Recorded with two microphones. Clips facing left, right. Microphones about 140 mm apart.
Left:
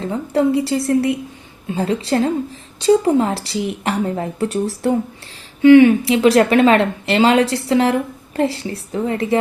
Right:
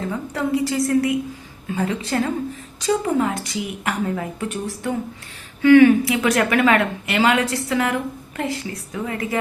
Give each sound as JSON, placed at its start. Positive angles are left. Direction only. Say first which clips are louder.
{"t": 0.1, "sound": "speech", "louder": "left 8 dB", "side_deg": 30}
{"t": 5.6, "sound": "speech", "louder": "left 3 dB", "side_deg": 20}